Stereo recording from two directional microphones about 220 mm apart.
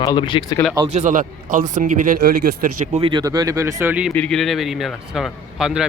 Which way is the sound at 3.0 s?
20° right (ahead or behind).